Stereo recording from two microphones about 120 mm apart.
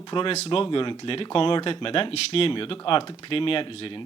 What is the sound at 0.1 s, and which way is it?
Speech, 45° left (ahead or behind).